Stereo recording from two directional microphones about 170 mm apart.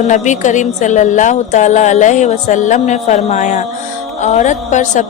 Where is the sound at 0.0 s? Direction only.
45° left (ahead or behind).